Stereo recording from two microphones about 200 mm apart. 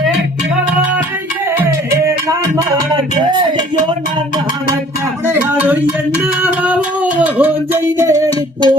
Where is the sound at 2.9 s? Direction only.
20° right (ahead or behind).